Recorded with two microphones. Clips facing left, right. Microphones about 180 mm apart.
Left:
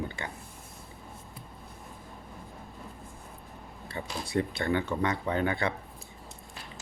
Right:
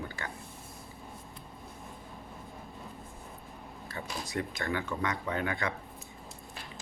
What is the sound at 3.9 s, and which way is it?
Speech, 30° left (ahead or behind).